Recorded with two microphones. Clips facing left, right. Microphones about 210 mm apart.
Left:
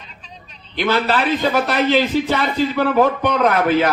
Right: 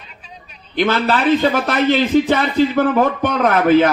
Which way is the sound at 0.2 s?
10° right (ahead or behind).